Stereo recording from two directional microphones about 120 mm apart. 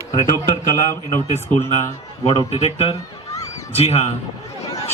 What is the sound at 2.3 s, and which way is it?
Speech, 50° left (ahead or behind).